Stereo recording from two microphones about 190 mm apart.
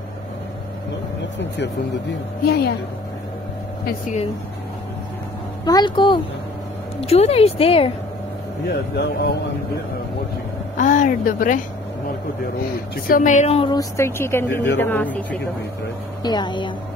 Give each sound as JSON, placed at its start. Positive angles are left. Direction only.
{"t": 2.4, "sound": "speech", "side_deg": 60}
{"t": 5.7, "sound": "speech", "side_deg": 20}
{"t": 8.6, "sound": "speech", "side_deg": 60}
{"t": 10.8, "sound": "a woman's voice", "side_deg": 45}
{"t": 12.9, "sound": "speech", "side_deg": 50}
{"t": 13.7, "sound": "speech", "side_deg": 15}
{"t": 16.2, "sound": "speech", "side_deg": 20}